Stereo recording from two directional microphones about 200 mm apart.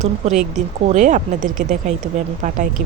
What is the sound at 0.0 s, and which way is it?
Speech, 35° right (ahead or behind).